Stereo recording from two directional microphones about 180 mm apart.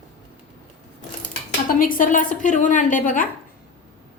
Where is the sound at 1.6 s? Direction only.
50° left (ahead or behind).